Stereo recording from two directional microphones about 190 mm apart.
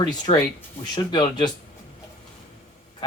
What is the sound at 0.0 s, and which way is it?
Speech, 20° left (ahead or behind).